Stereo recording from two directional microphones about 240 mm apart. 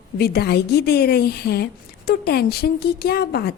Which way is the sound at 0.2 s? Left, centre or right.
Left.